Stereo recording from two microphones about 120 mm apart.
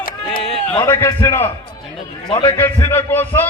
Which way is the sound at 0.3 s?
Centre (ahead or behind).